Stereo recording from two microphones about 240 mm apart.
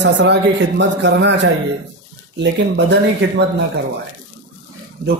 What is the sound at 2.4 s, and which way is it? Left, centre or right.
Speech, right.